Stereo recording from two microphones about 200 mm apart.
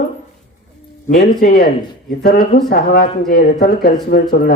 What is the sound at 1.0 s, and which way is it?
Speech, 40° left (ahead or behind).